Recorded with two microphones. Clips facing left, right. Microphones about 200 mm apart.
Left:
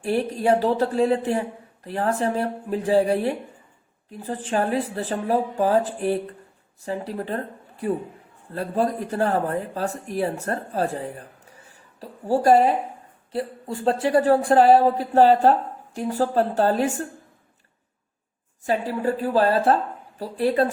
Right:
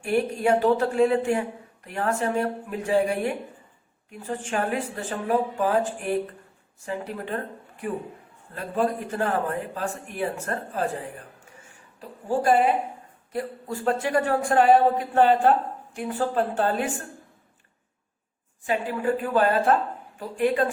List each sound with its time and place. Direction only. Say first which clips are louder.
0.0 s speech: left 1 dB; 35° left (ahead or behind)
18.6 s speech: left 2 dB; 35° left (ahead or behind)